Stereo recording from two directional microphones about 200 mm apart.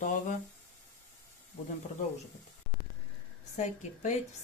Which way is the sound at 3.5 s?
35° left (ahead or behind).